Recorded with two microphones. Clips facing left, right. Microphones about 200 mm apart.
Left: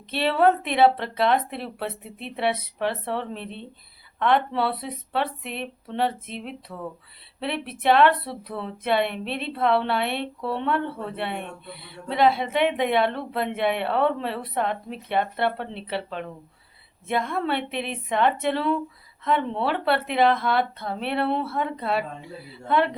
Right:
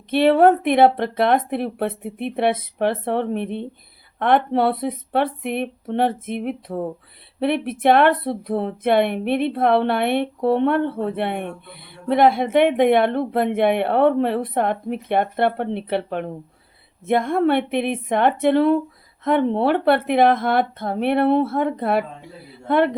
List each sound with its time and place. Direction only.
0.1 s speech: 50° right (ahead or behind)